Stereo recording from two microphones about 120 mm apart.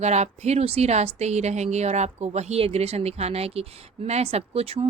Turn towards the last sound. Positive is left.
turn(degrees=-55)  # may be behind; listen again after turning